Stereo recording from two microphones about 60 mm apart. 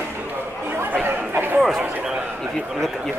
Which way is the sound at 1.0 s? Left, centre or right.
Right.